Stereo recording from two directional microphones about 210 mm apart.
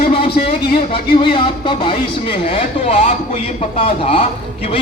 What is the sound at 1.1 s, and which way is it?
Speech, 25° left (ahead or behind).